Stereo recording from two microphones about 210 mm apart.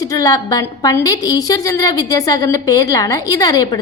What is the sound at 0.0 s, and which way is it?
A woman's voice, 15° left (ahead or behind).